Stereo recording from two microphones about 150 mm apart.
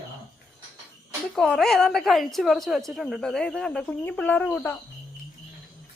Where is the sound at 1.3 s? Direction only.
5° left (ahead or behind).